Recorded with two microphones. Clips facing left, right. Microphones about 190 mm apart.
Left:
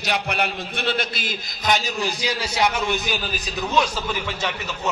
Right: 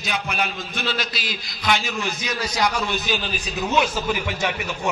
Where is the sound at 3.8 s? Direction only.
10° right (ahead or behind).